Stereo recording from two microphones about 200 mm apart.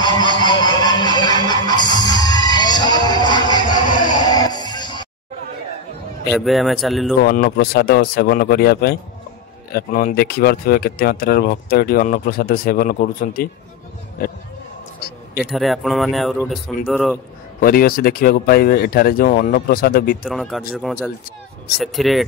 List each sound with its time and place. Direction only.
0.0 s music: 20° left (ahead or behind)
6.3 s speech: centre (ahead or behind)
7.2 s speech: 50° left (ahead or behind)
15.0 s a sound: 55° left (ahead or behind)
15.5 s speech: centre (ahead or behind)
17.6 s speech: 45° left (ahead or behind)
20.2 s speech: centre (ahead or behind)